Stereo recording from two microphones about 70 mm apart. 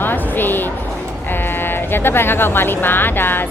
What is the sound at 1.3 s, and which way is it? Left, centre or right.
Speech, left.